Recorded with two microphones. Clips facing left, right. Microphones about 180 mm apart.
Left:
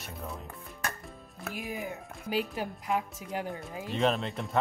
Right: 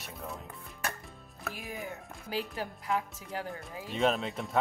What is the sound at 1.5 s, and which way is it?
A woman's voice, 15° left (ahead or behind).